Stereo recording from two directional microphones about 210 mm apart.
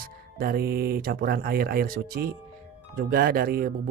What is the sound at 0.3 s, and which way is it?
Speech, 45° right (ahead or behind).